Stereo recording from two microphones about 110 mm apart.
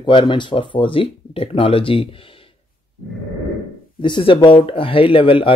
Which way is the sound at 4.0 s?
50° left (ahead or behind).